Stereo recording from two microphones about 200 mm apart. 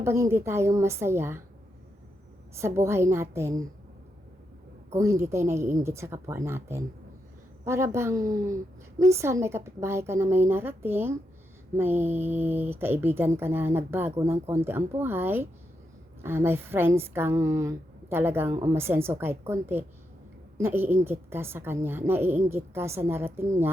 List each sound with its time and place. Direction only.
0.0 s speech: 15° right (ahead or behind)
2.6 s speech: 15° right (ahead or behind)
4.9 s speech: 15° right (ahead or behind)